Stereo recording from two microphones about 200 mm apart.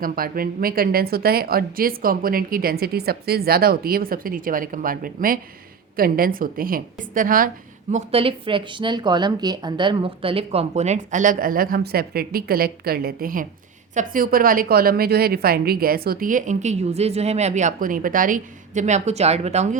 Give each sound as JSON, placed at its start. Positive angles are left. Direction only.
{"t": 0.0, "sound": "a woman's voice", "side_deg": -45}